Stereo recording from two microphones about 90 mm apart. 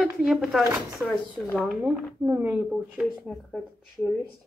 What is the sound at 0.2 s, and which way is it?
Speech, 10° right (ahead or behind).